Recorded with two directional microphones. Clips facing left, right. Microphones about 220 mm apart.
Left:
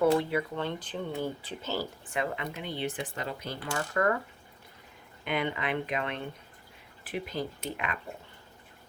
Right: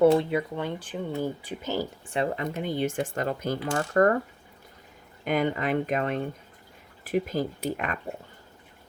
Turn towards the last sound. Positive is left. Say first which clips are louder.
# right 6 dB
turn(degrees=-45)  # may be behind; listen again after turning